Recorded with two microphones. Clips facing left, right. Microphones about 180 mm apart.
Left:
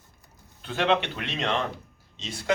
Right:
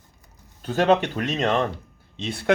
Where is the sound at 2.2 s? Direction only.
60° right (ahead or behind).